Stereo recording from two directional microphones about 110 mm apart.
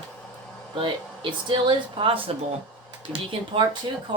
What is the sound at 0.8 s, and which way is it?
Speech, 50° right (ahead or behind).